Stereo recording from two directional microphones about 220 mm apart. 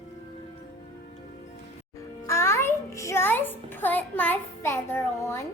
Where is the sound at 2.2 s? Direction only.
10° left (ahead or behind).